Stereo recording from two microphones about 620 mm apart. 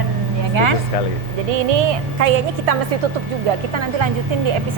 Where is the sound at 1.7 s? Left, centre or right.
Right.